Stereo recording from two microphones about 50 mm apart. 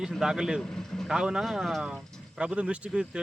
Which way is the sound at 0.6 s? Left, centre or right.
Centre.